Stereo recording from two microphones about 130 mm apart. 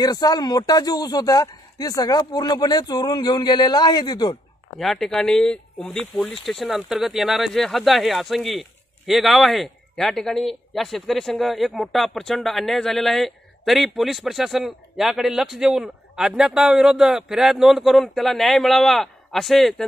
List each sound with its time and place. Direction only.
0.0 s speech: 30° left (ahead or behind)
4.7 s speech: centre (ahead or behind)